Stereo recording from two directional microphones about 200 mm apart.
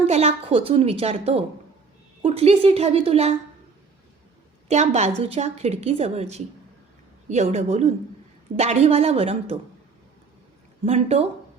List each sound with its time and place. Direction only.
0.0 s a woman's voice: 30° right (ahead or behind)
4.7 s a woman's voice: 35° right (ahead or behind)
10.8 s a woman's voice: 30° right (ahead or behind)